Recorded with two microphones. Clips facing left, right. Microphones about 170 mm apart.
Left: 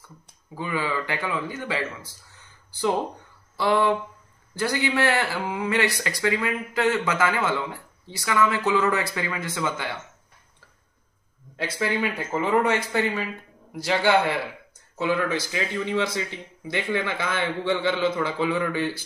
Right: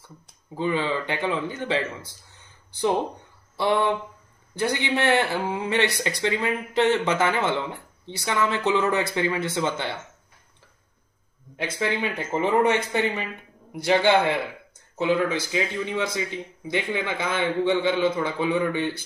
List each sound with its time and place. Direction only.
0.6 s speech: 25° right (ahead or behind)
3.5 s speech: 25° right (ahead or behind)
11.5 s speech: 20° right (ahead or behind)